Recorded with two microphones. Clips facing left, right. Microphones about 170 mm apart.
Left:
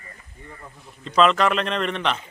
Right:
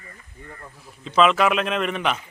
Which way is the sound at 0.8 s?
Centre (ahead or behind).